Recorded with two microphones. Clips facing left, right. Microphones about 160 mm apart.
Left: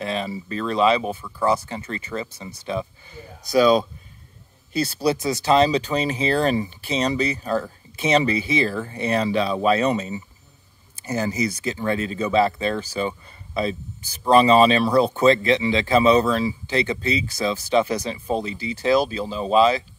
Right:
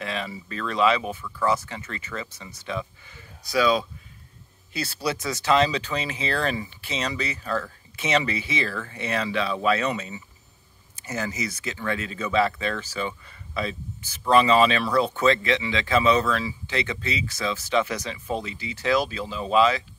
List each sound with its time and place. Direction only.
0.0 s speech: 30° left (ahead or behind)
4.9 s speech: 35° left (ahead or behind)